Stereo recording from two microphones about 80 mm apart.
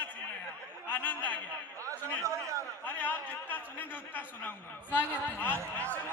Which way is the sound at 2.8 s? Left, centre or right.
Centre.